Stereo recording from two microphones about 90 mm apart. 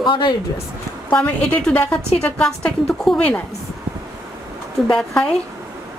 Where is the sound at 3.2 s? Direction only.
15° left (ahead or behind).